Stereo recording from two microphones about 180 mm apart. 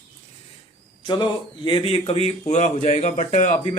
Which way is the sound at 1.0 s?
25° left (ahead or behind).